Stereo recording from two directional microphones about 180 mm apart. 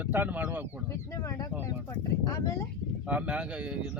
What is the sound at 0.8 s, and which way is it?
Speech, 15° left (ahead or behind).